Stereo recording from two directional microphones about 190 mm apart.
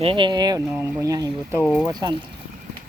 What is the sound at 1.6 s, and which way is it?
Speech, 5° left (ahead or behind).